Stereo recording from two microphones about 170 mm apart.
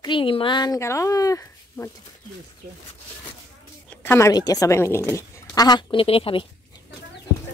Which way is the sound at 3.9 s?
15° left (ahead or behind).